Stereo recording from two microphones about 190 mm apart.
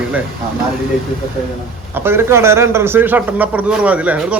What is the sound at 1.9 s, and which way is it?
A man's voice, 10° right (ahead or behind).